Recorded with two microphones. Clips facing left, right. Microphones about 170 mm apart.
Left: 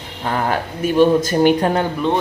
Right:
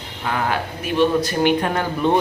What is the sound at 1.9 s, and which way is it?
Speech, 5° right (ahead or behind).